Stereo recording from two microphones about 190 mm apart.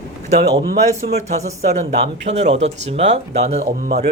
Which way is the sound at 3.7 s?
50° right (ahead or behind).